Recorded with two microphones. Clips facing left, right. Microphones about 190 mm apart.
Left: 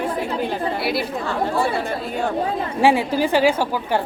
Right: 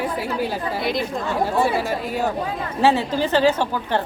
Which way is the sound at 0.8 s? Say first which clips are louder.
Right 2 dB; 5° left (ahead or behind).